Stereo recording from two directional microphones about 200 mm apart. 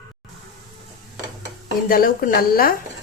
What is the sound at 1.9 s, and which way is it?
Speech, 45° left (ahead or behind).